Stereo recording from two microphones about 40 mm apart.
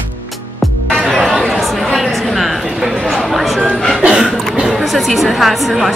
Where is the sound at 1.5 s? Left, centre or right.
Centre.